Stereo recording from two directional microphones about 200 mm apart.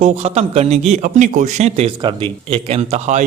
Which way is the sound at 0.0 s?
35° right (ahead or behind).